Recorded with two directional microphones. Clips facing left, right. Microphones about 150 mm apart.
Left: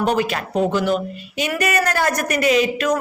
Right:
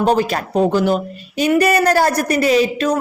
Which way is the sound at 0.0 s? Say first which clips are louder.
Right 4 dB; 35° right (ahead or behind).